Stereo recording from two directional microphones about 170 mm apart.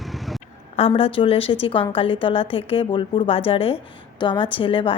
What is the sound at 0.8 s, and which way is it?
A woman's voice, 35° left (ahead or behind).